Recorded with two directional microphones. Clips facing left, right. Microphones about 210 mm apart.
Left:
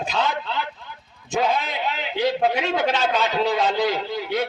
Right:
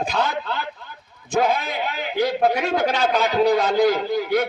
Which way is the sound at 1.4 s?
45° right (ahead or behind).